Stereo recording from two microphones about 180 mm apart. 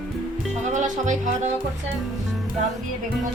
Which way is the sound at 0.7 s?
45° right (ahead or behind).